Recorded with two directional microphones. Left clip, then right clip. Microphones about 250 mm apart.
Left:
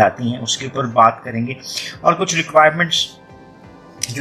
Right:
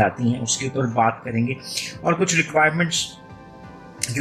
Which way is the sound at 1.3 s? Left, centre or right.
Left.